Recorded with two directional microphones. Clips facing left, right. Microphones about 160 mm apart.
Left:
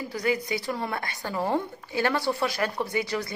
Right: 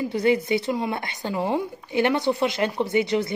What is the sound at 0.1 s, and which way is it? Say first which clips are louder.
Speech: right 5 dB; 25° right (ahead or behind).